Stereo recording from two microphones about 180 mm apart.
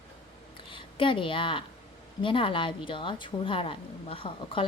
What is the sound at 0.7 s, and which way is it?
A woman's voice, 30° left (ahead or behind).